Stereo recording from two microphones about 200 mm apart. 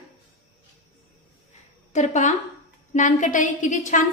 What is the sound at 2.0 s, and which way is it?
A woman's voice, 35° left (ahead or behind).